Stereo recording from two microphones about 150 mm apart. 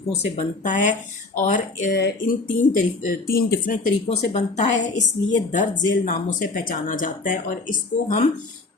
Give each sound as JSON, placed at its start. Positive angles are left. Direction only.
{"t": 0.1, "sound": "a woman's voice", "side_deg": 50}
{"t": 1.9, "sound": "music", "side_deg": 90}
{"t": 2.7, "sound": "a woman's voice", "side_deg": 65}
{"t": 4.3, "sound": "a woman's voice", "side_deg": 45}